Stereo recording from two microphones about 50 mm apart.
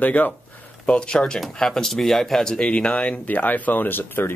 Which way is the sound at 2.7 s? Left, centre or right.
Left.